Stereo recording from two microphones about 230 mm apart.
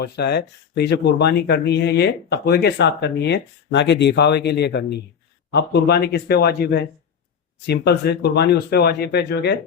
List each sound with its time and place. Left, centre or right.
0.0 s speech: left